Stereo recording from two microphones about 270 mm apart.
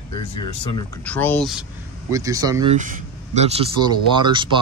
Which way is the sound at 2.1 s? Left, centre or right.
Centre.